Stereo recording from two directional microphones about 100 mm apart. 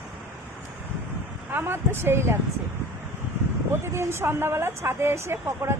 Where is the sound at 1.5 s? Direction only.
25° right (ahead or behind).